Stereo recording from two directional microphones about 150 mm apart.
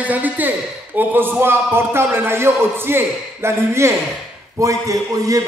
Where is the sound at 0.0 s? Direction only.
10° right (ahead or behind).